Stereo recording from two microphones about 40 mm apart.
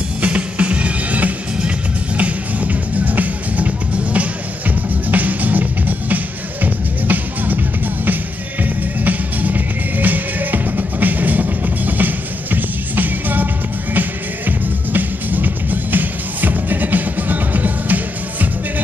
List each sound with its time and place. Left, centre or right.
0.2 s music: right